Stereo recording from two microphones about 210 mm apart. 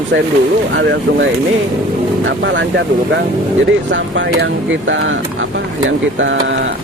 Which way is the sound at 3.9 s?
60° right (ahead or behind).